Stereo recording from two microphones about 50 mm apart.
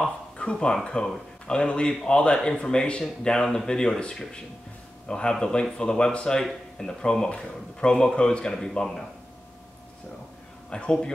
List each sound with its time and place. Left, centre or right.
0.4 s speech: centre
10.7 s speech: centre